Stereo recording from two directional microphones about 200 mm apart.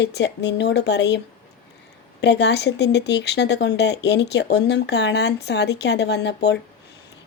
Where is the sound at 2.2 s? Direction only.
60° left (ahead or behind).